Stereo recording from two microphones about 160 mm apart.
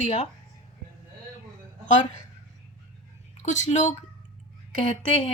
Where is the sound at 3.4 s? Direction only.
50° left (ahead or behind).